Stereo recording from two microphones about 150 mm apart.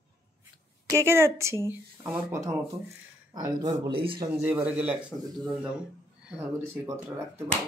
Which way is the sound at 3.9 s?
35° right (ahead or behind).